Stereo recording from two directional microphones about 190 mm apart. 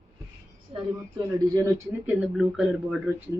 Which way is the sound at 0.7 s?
20° right (ahead or behind).